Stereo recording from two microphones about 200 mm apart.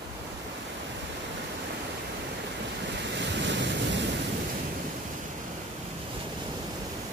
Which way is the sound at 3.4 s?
65° right (ahead or behind).